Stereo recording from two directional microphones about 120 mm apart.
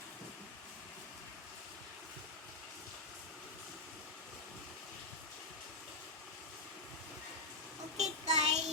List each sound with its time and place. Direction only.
7.9 s child singing: 70° right (ahead or behind)